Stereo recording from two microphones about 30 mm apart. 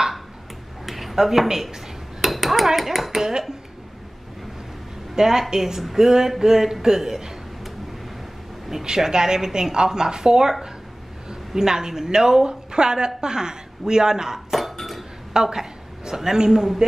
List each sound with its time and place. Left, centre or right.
0.8 s a sound: centre
2.2 s dishes: centre
5.1 s a woman's voice: centre
8.8 s a woman's voice: right
14.5 s a sound: centre
15.3 s a woman's voice: centre